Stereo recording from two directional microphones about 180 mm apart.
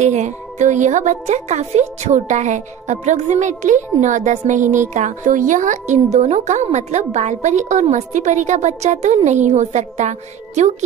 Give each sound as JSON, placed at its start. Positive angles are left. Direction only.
{"t": 0.0, "sound": "speech", "side_deg": -40}